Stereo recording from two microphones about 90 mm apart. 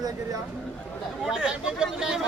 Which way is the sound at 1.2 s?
10° right (ahead or behind).